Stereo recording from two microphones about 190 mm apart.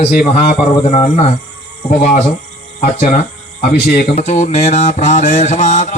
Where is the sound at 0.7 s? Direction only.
30° left (ahead or behind).